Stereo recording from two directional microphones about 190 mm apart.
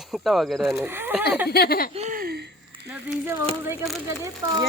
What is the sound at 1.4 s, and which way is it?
Speech, 55° left (ahead or behind).